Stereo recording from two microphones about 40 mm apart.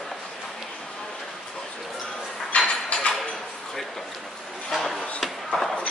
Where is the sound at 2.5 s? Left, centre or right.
Left.